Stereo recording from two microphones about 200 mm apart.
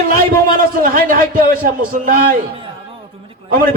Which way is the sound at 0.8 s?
45° right (ahead or behind).